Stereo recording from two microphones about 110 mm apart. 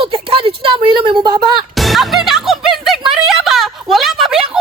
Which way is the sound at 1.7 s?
Centre (ahead or behind).